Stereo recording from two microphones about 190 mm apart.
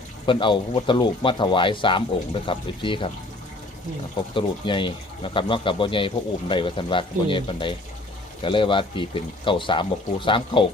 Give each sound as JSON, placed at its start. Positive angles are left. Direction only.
{"t": 0.3, "sound": "speech", "side_deg": 25}
{"t": 4.4, "sound": "speech", "side_deg": 25}